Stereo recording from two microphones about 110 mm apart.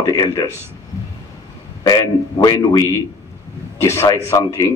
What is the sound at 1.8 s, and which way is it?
A man's voice, 35° left (ahead or behind).